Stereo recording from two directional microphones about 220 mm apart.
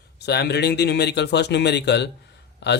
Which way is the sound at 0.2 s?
50° left (ahead or behind).